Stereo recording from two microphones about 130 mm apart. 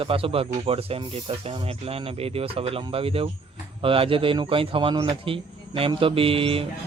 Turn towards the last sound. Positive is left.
turn(degrees=-45)  # may be behind; listen again after turning